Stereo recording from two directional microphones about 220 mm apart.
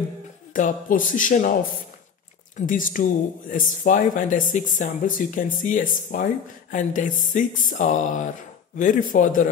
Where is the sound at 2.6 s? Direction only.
35° left (ahead or behind).